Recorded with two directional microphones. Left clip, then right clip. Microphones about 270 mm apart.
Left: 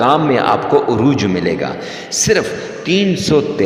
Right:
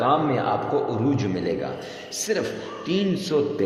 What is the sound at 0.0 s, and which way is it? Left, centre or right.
A man's voice, left.